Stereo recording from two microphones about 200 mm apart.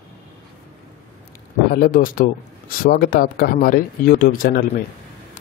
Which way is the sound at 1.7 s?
45° left (ahead or behind).